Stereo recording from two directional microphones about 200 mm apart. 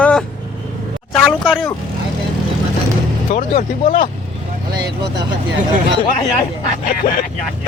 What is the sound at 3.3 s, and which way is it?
Speech, 40° left (ahead or behind).